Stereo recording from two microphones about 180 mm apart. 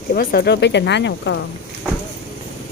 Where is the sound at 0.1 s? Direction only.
50° left (ahead or behind); by 1.5 s 90° left.